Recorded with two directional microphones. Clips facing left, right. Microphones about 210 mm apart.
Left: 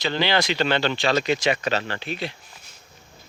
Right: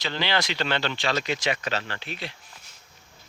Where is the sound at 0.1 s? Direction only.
15° left (ahead or behind).